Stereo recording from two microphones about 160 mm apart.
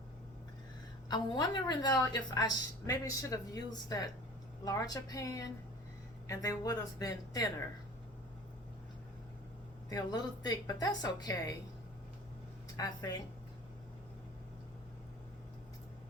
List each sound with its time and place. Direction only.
1.0 s a woman's voice: 25° left (ahead or behind)
9.9 s a woman's voice: 25° left (ahead or behind)
12.7 s a woman's voice: 20° left (ahead or behind)